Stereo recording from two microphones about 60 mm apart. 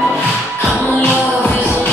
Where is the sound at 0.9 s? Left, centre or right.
Left.